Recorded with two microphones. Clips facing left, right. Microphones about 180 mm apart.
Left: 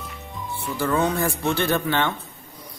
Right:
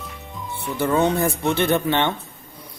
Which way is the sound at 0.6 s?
20° right (ahead or behind).